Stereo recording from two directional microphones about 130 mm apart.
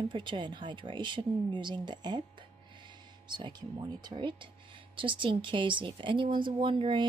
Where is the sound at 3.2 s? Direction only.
35° right (ahead or behind).